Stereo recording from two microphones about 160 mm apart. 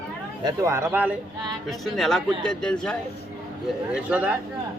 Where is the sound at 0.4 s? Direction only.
20° right (ahead or behind).